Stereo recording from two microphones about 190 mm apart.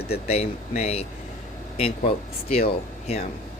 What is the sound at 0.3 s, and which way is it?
Speech, 35° left (ahead or behind).